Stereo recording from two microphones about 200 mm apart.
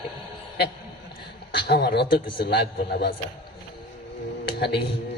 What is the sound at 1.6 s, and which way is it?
Speech, 55° left (ahead or behind).